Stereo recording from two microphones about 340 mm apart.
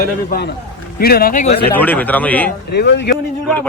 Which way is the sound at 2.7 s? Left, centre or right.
Left.